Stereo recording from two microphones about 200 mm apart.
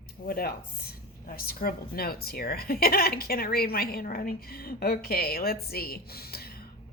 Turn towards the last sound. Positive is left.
turn(degrees=50)  # may be behind; listen again after turning